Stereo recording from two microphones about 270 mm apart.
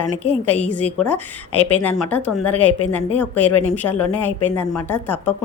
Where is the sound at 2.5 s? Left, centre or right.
Left.